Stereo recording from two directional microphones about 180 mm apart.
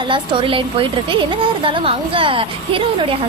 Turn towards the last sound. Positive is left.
turn(degrees=-30)  # may be behind; listen again after turning